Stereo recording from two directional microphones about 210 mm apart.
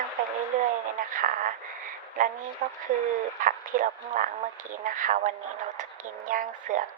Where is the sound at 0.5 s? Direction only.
40° right (ahead or behind).